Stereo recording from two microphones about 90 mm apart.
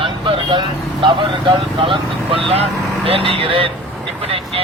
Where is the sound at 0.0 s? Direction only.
75° right (ahead or behind).